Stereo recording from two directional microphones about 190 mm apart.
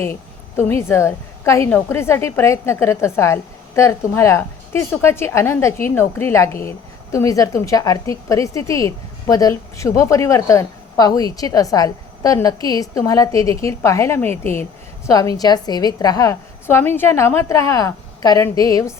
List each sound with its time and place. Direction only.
0.0 s a woman's voice: 10° left (ahead or behind)